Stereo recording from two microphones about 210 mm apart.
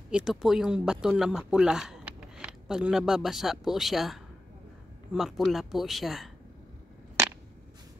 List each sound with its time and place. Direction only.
0.1 s speech: 5° right (ahead or behind)